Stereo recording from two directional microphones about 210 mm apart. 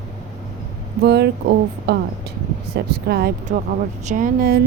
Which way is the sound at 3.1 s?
45° right (ahead or behind).